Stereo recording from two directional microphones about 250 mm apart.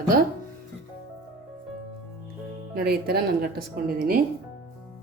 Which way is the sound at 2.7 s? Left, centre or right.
Right.